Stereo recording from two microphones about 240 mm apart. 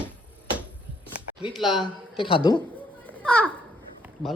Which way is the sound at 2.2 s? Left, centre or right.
Left.